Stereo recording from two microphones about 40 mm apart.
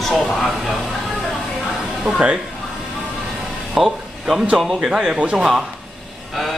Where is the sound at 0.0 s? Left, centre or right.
Centre.